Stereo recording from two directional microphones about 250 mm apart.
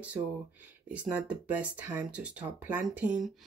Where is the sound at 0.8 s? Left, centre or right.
Centre.